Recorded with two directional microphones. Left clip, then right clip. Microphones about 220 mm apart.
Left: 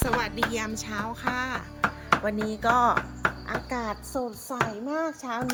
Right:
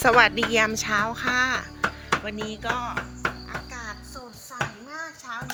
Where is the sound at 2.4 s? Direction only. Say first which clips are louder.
Left 6 dB; 25° left (ahead or behind).